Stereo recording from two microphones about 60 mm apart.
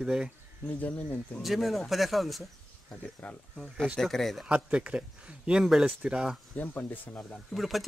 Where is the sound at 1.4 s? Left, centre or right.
Centre.